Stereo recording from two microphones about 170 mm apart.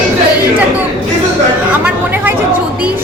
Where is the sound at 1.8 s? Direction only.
10° right (ahead or behind).